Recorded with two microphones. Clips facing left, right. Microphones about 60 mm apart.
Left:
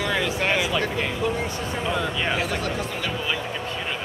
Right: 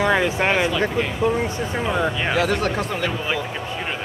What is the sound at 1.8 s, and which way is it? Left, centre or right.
Speech, centre.